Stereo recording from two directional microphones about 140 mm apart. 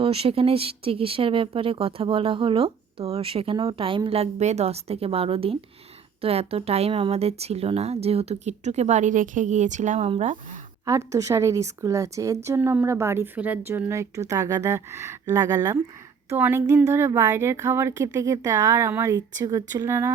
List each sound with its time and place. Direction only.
0.0 s speech: 45° right (ahead or behind); by 10.1 s 60° right (ahead or behind)
10.8 s a woman's voice: 20° right (ahead or behind)